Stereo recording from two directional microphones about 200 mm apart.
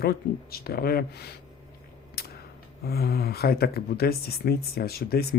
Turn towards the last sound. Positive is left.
turn(degrees=50)  # may be behind; listen again after turning